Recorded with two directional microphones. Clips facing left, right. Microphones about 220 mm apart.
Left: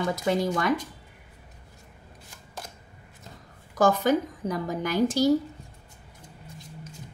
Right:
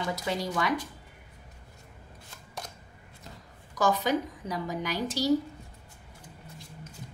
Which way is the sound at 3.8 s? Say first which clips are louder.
Left 5 dB; 50° left (ahead or behind).